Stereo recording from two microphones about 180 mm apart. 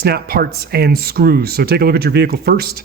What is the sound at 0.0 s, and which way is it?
Speech, 60° right (ahead or behind).